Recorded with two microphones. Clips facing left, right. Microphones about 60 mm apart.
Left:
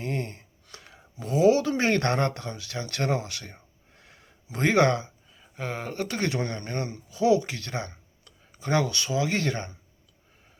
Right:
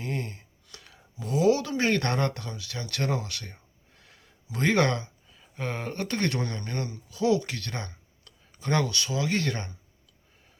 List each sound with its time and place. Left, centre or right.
0.0 s speech: left
2.9 s a sound: left
5.5 s speech: centre
6.4 s speech: left
8.9 s speech: left